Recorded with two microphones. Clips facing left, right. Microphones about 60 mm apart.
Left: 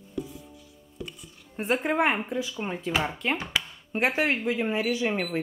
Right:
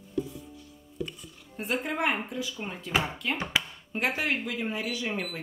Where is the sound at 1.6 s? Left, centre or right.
Left.